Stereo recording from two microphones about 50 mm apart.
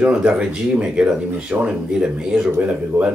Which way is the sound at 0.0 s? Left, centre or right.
Centre.